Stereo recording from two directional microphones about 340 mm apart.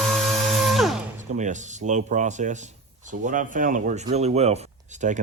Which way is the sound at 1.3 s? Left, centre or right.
Right.